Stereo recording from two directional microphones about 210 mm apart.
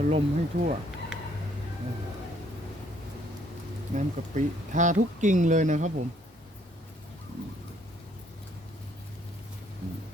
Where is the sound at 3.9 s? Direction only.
35° right (ahead or behind).